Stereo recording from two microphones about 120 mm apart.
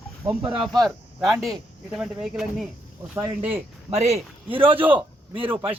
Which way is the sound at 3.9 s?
65° right (ahead or behind).